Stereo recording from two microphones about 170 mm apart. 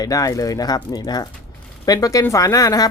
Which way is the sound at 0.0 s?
20° left (ahead or behind).